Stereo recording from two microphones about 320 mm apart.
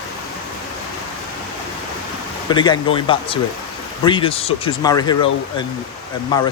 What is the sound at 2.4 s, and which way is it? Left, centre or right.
Speech, centre.